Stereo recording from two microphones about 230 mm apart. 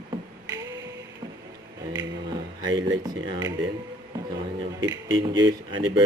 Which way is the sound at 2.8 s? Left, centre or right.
Centre.